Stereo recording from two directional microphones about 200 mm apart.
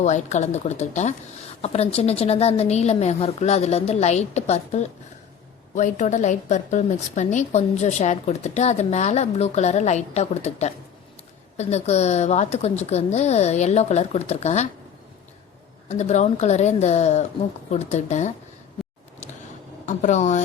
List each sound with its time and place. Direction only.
0.0 s a woman's voice: 35° left (ahead or behind)
15.9 s a woman's voice: 35° left (ahead or behind)
19.8 s a woman's voice: 40° left (ahead or behind)